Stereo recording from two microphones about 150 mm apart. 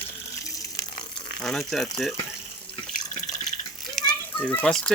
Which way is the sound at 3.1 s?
50° left (ahead or behind).